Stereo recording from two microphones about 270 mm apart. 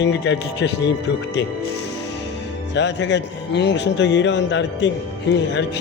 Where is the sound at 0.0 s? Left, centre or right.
Left.